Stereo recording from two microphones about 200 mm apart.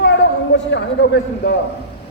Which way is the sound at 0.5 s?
60° left (ahead or behind).